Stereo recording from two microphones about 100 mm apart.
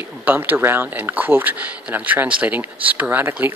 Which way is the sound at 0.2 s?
20° right (ahead or behind).